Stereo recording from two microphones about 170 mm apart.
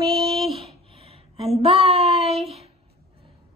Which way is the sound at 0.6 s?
35° right (ahead or behind).